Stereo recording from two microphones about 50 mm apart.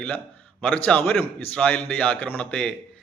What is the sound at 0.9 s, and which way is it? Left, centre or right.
Speech, left.